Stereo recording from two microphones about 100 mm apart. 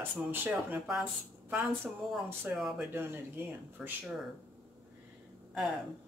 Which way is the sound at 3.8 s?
5° right (ahead or behind).